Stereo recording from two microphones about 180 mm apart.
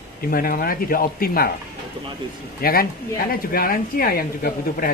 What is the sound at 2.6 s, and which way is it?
A man's voice, 55° left (ahead or behind).